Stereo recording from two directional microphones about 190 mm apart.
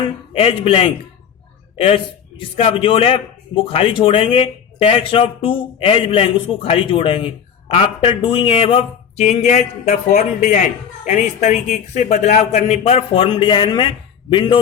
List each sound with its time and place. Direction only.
0.3 s a man's voice: 30° left (ahead or behind)
2.4 s a man's voice: 30° left (ahead or behind)